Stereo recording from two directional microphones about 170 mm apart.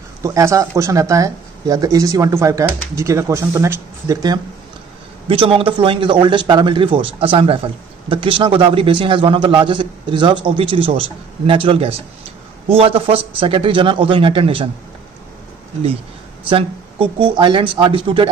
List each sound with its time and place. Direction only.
0.2 s speech: 20° right (ahead or behind)
5.3 s a man's voice: 35° right (ahead or behind)
16.4 s a man's voice: 30° right (ahead or behind)